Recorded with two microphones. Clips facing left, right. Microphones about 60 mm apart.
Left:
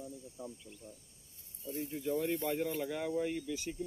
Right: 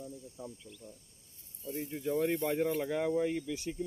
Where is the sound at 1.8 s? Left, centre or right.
Right.